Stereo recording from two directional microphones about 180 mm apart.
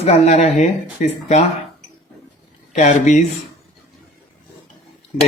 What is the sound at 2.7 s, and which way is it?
Speech, 40° left (ahead or behind).